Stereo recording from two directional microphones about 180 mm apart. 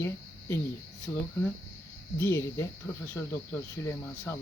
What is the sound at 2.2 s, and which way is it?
Speech, 15° left (ahead or behind).